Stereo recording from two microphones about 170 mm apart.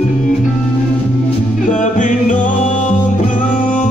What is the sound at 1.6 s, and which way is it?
Music, 50° left (ahead or behind).